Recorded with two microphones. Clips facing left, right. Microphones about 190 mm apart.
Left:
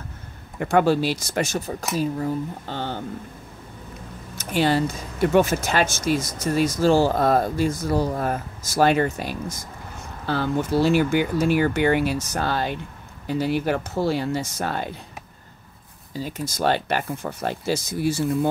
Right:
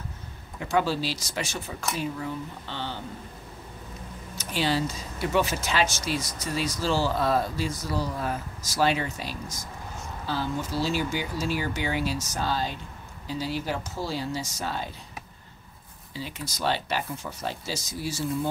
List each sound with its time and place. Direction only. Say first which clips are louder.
0.6 s speech: left 7 dB; 55° left (ahead or behind)
4.4 s speech: left 6 dB; 50° left (ahead or behind)
16.2 s speech: left 7 dB; 45° left (ahead or behind)